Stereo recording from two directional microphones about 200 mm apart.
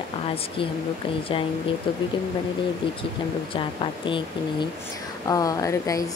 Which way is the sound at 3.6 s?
25° left (ahead or behind).